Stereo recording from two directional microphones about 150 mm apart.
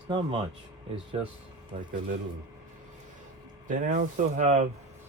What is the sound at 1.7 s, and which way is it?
Speech, 50° right (ahead or behind).